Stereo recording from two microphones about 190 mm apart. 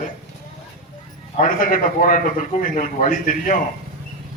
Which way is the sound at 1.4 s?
45° left (ahead or behind).